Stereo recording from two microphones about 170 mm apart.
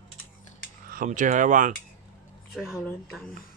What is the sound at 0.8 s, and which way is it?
Speech, 50° right (ahead or behind).